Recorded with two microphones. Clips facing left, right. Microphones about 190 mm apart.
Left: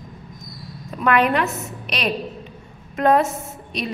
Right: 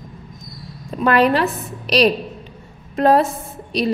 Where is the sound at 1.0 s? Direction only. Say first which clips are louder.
Right 3 dB; 35° right (ahead or behind).